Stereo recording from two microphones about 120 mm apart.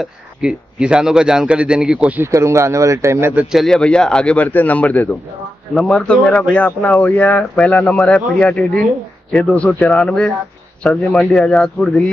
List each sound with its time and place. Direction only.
0.0 s a man's voice: 5° right (ahead or behind)
2.2 s speech: 25° right (ahead or behind)
3.5 s speech: 5° left (ahead or behind)